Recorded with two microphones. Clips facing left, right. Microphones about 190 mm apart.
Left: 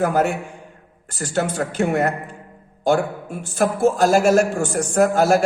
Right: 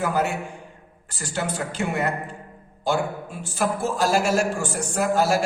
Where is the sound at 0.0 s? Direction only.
50° left (ahead or behind).